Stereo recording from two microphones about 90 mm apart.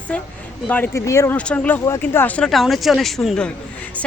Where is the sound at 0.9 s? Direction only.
30° left (ahead or behind).